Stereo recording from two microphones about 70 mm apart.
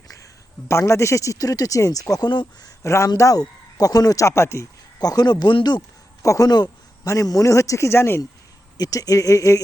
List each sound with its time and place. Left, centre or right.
0.7 s speech: left
2.1 s speech: left
2.8 s speech: left
3.2 s speech: left
4.9 s speech: left
6.2 s speech: left
8.8 s speech: left